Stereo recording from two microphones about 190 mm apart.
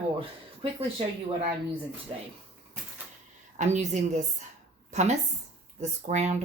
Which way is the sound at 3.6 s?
40° right (ahead or behind).